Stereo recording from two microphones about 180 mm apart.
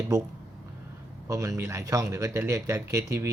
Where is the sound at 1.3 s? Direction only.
15° right (ahead or behind).